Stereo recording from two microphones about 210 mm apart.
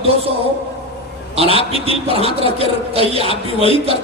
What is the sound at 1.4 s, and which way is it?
A man's voice, 30° right (ahead or behind).